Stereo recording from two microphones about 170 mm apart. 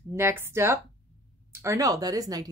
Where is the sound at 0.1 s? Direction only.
15° right (ahead or behind).